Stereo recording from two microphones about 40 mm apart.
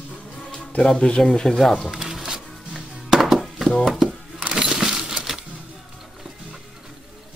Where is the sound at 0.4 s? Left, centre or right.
Centre.